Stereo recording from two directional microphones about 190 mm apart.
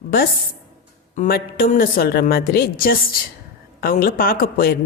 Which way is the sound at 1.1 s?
45° left (ahead or behind).